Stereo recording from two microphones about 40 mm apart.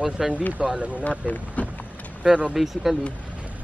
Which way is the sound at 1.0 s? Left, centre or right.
Left.